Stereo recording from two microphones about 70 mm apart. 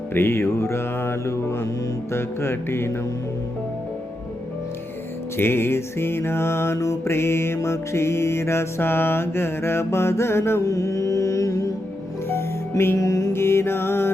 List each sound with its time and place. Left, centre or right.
0.1 s mantra: left
5.4 s mantra: left
10.6 s music: left
12.3 s music: left
13.0 s mantra: left
13.3 s mantra: left